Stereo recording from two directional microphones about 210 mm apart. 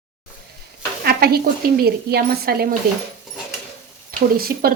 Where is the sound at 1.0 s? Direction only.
45° right (ahead or behind).